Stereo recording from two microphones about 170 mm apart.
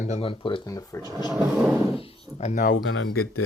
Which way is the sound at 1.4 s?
10° right (ahead or behind).